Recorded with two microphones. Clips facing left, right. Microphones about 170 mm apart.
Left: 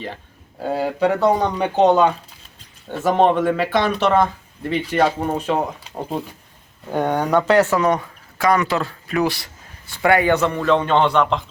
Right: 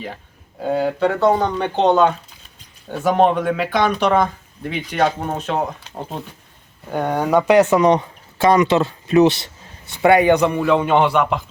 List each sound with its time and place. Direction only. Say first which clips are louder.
0.6 s speech: right 1 dB; centre (ahead or behind)
6.9 s speech: right 1 dB; centre (ahead or behind)